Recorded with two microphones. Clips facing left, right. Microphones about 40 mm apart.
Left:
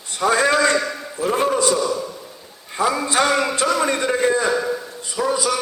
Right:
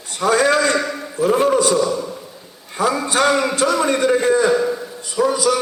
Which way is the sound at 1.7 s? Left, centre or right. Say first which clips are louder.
Right 2 dB; centre.